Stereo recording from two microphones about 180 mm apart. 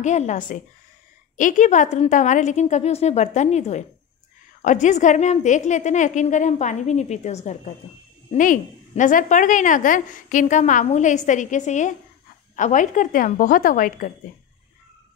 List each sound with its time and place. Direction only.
0.0 s a woman's voice: 40° left (ahead or behind)